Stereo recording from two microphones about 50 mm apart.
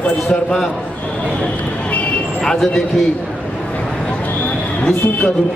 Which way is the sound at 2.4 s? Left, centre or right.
Centre.